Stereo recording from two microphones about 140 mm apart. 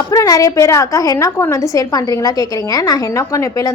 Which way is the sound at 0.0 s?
25° left (ahead or behind).